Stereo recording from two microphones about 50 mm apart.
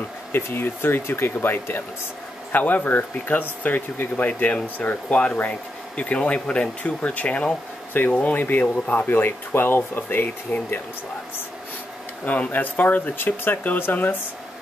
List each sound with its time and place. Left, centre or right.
0.3 s speech: left
4.8 s speech: centre
8.4 s speech: left
12.3 s speech: left